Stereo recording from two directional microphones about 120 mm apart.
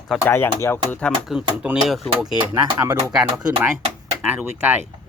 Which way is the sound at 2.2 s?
25° right (ahead or behind).